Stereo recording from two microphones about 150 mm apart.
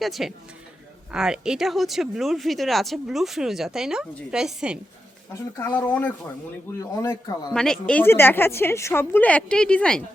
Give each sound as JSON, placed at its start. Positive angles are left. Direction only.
{"t": 0.0, "sound": "speech", "side_deg": 0}
{"t": 5.3, "sound": "a woman's voice", "side_deg": 20}
{"t": 7.5, "sound": "a woman's voice", "side_deg": 5}